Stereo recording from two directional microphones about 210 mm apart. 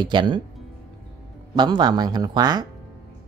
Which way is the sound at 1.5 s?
20° right (ahead or behind).